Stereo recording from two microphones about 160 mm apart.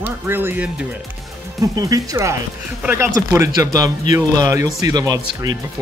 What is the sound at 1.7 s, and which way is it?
Speech, 20° right (ahead or behind).